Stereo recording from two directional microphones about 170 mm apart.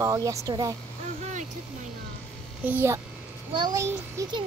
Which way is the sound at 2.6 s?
10° right (ahead or behind).